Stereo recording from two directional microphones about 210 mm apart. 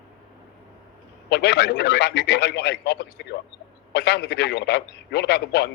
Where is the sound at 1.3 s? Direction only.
55° left (ahead or behind).